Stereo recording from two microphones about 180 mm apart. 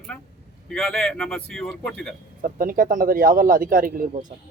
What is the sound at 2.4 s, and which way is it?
Speech, 50° right (ahead or behind).